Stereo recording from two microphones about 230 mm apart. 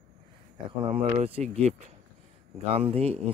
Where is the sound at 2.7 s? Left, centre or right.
Right.